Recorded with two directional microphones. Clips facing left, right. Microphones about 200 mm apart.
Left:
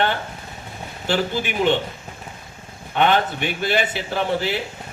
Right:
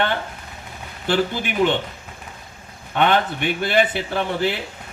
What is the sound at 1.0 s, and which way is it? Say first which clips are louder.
Speech: right 1 dB; 55° right (ahead or behind).